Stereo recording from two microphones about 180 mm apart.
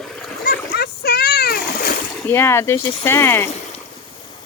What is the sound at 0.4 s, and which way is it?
Splash, 60° left (ahead or behind).